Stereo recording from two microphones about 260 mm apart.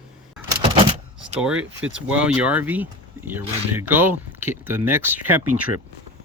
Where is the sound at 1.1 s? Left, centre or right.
Centre.